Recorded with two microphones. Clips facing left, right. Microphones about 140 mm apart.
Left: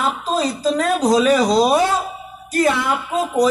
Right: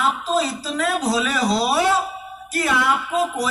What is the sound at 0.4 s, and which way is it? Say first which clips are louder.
Speech: left 4 dB; 40° left (ahead or behind).